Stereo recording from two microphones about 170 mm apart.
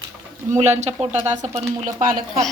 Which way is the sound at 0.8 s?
40° right (ahead or behind).